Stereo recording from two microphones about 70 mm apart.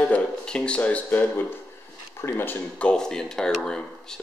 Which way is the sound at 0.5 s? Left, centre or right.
Centre.